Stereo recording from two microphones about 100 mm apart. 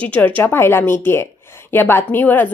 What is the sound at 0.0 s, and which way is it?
A woman's voice, 15° left (ahead or behind).